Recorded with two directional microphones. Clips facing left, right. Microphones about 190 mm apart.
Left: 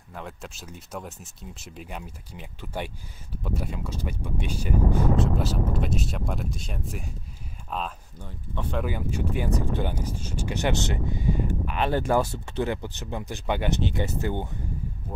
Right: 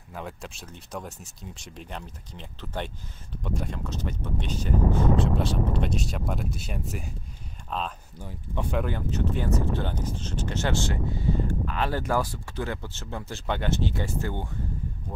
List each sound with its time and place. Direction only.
0.1 s speech: centre (ahead or behind)
8.2 s speech: 10° right (ahead or behind)
8.8 s speech: 10° left (ahead or behind)